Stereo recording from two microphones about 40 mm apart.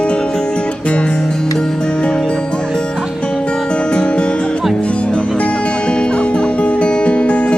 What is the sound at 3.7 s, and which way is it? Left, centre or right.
Music, left.